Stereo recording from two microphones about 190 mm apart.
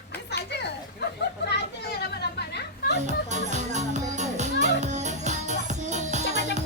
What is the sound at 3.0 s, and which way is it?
Music, 40° right (ahead or behind).